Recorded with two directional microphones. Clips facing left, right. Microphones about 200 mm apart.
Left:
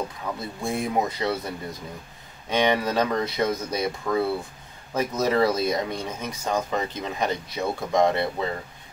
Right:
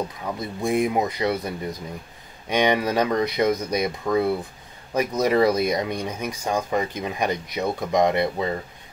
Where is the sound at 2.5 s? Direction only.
15° right (ahead or behind).